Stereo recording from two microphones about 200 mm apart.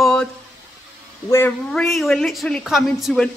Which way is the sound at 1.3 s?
5° left (ahead or behind).